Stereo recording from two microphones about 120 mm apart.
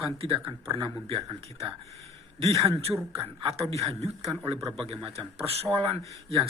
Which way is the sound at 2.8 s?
55° right (ahead or behind).